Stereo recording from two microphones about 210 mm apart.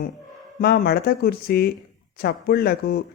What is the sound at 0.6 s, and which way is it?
Speech, 50° left (ahead or behind).